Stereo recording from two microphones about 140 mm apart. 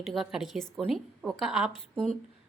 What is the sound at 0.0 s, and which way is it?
A woman's voice, centre (ahead or behind).